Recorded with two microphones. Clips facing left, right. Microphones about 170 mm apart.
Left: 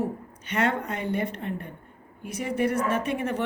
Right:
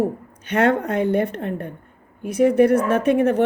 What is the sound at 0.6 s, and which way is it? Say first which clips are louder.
A woman's voice: right 8 dB; 60° right (ahead or behind).